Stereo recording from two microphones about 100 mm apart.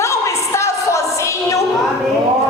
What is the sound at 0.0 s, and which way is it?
Music, 30° left (ahead or behind).